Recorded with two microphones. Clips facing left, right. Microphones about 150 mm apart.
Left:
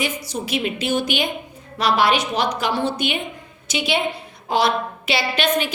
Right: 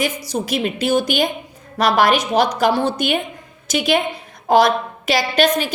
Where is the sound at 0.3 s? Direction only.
45° right (ahead or behind).